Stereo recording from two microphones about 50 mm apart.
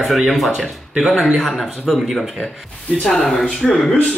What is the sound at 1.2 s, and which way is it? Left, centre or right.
Speech, centre.